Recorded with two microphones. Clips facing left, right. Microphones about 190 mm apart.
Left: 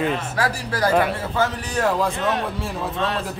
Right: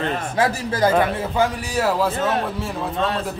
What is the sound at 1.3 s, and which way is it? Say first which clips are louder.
A man's voice: right 2 dB; 10° right (ahead or behind).